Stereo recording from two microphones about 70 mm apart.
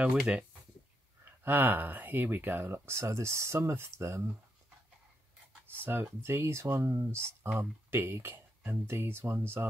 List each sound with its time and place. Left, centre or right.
1.2 s speech: right
5.7 s speech: right